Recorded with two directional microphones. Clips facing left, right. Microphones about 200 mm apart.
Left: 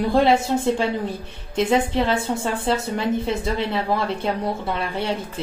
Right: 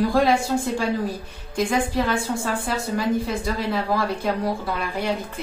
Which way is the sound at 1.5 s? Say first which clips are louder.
Left 3 dB; 25° left (ahead or behind).